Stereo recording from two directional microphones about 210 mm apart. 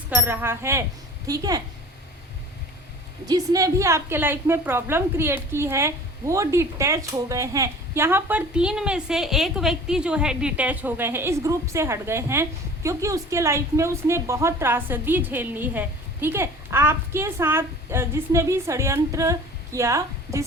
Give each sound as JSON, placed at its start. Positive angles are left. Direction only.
{"t": 0.1, "sound": "a woman's voice", "side_deg": -10}
{"t": 3.2, "sound": "a woman's voice", "side_deg": -15}